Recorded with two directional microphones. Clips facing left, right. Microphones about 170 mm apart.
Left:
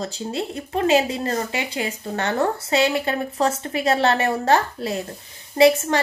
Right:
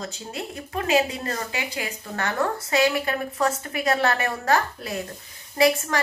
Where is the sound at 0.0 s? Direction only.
30° left (ahead or behind).